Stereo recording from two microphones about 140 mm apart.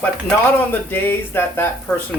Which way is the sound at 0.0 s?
15° left (ahead or behind).